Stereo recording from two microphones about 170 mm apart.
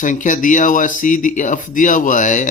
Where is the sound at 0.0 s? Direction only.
50° left (ahead or behind).